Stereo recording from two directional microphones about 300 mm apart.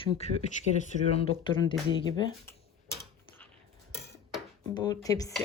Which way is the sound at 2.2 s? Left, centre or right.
Centre.